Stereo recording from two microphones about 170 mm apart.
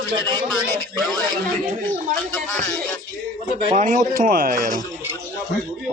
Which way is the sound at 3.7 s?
50° right (ahead or behind).